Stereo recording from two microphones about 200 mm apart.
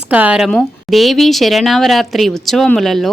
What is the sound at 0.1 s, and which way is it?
Speech, 5° right (ahead or behind).